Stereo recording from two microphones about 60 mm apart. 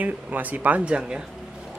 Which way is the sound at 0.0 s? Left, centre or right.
Right.